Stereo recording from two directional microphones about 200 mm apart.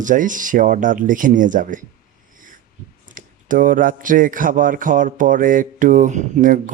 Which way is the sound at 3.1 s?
40° right (ahead or behind).